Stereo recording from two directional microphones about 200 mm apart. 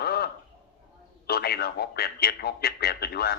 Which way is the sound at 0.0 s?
50° left (ahead or behind).